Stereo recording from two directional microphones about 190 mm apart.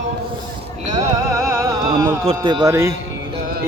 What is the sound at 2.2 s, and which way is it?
Speech, 25° right (ahead or behind).